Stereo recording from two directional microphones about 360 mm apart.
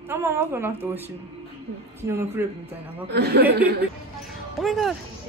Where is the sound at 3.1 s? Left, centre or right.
Right.